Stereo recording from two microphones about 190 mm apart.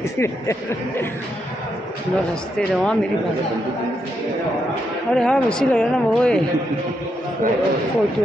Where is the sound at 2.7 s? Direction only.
5° left (ahead or behind).